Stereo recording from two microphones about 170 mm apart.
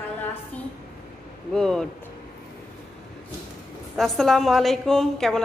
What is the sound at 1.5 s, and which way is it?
Speech, 5° left (ahead or behind).